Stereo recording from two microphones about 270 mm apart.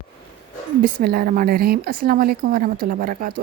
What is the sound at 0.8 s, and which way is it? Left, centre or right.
A woman's voice, right.